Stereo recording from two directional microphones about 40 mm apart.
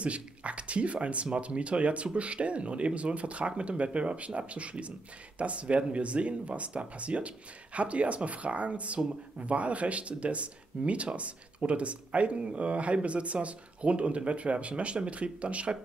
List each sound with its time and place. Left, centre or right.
0.0 s speech: right